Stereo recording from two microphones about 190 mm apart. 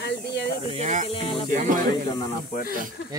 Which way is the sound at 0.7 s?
35° right (ahead or behind).